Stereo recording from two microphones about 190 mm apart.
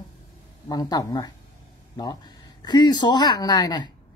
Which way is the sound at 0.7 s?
20° left (ahead or behind).